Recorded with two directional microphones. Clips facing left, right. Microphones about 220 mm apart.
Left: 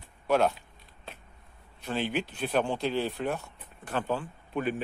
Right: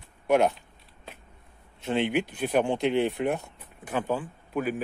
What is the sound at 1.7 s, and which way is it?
Speech, 20° right (ahead or behind).